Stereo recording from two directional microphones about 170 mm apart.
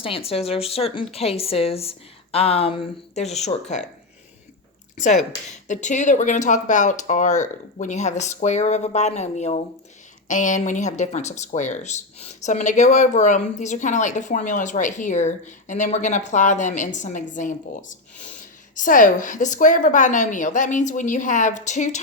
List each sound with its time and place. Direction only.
0.0 s a woman's voice: 35° left (ahead or behind)
5.6 s speech: 45° left (ahead or behind)